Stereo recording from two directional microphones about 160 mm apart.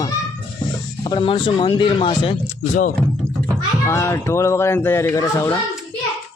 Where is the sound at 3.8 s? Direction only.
15° left (ahead or behind).